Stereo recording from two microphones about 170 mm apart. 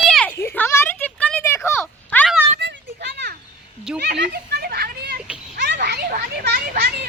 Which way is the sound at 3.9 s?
80° right.